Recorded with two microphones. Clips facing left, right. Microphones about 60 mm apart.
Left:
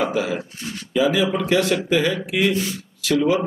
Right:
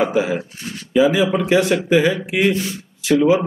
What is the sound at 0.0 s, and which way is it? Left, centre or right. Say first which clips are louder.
Speech: right 4 dB; right.